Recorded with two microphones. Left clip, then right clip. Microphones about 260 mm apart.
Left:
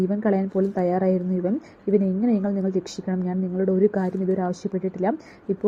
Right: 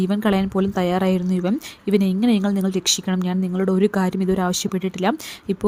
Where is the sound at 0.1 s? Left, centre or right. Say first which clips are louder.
Right 2 dB; right.